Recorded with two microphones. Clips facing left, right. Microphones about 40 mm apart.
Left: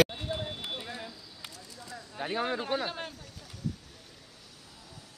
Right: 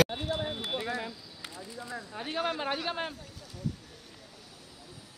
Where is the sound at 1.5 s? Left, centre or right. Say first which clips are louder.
Right 9 dB; right.